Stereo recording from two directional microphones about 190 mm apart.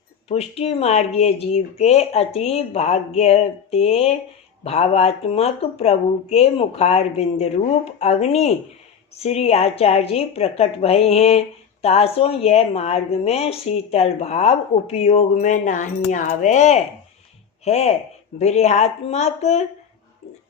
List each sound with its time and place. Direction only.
0.3 s a woman's voice: 35° left (ahead or behind)